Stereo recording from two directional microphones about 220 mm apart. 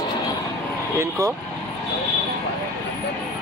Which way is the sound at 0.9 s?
15° right (ahead or behind).